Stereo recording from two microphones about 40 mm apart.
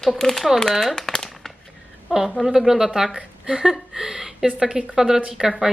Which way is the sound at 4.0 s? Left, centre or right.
Centre.